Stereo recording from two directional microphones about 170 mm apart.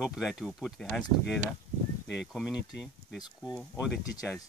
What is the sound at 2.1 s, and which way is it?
Speech, centre (ahead or behind).